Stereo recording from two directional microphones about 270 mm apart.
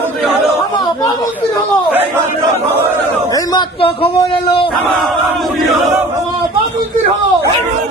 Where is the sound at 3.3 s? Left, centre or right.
Centre.